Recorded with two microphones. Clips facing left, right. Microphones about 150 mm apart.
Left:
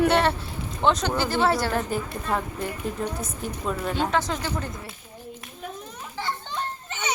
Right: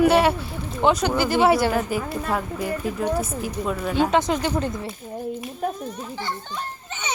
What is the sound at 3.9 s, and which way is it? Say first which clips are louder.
Speech: right 8 dB; 15° right (ahead or behind).